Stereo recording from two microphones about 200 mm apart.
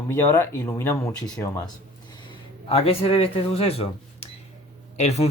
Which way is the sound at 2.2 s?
25° left (ahead or behind).